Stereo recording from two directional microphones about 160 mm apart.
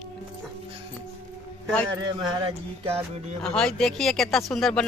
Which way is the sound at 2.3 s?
35° right (ahead or behind).